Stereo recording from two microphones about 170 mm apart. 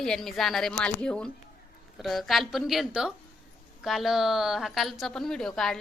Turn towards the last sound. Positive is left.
turn(degrees=5)  # may be behind; listen again after turning